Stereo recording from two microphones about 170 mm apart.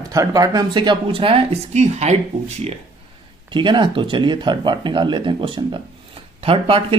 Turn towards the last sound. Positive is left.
turn(degrees=-35)  # may be behind; listen again after turning